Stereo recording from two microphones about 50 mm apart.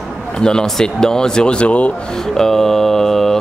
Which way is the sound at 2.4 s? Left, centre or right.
Centre.